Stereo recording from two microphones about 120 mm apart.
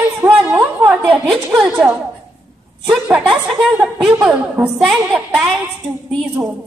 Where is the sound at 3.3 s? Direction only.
5° right (ahead or behind).